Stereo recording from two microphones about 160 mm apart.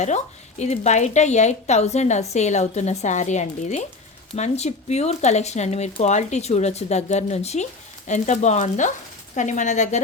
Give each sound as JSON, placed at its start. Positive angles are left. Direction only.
{"t": 0.6, "sound": "speech", "side_deg": 45}